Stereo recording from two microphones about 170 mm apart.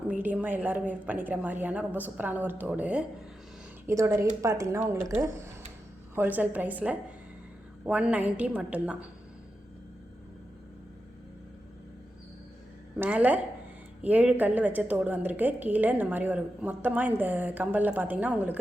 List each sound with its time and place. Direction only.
0.1 s a woman's voice: 10° right (ahead or behind)
13.0 s a woman's voice: 10° right (ahead or behind)